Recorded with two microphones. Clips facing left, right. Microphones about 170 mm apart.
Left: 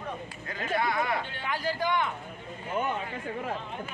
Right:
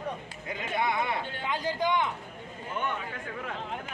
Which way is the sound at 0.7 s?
20° right (ahead or behind).